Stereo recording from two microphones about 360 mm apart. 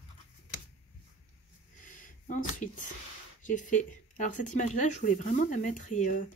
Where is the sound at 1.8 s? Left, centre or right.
Left.